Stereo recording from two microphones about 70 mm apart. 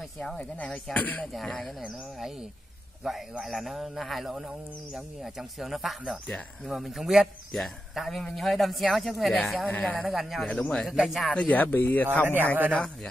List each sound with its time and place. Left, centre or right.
0.9 s speech: centre
1.2 s speech: centre
3.0 s a man's voice: centre
6.2 s speech: centre
6.7 s a man's voice: centre
9.8 s speech: centre
10.0 s a man's voice: centre
10.5 s speech: centre
10.9 s a man's voice: centre
11.3 s speech: left
12.7 s speech: centre